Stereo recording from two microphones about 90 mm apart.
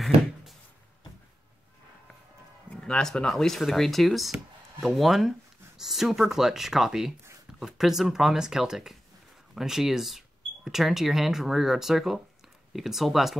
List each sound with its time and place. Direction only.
2.7 s speech: 10° left (ahead or behind)